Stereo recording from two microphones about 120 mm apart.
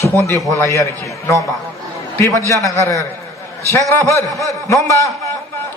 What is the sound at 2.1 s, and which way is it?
A man's voice, 25° left (ahead or behind).